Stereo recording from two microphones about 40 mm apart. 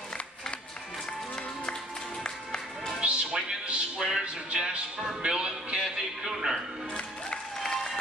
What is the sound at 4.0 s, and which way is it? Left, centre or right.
Music, centre.